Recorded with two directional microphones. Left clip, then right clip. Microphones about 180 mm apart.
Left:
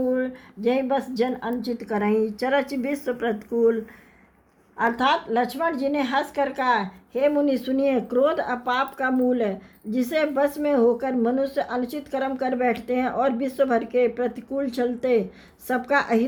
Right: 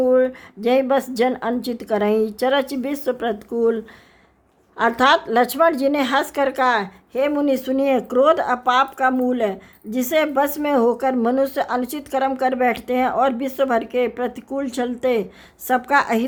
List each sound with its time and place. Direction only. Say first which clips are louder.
0.0 s a woman's voice: right 8 dB; 40° right (ahead or behind)
4.8 s a woman's voice: right 6 dB; 45° right (ahead or behind); by 16.2 s 25° right (ahead or behind)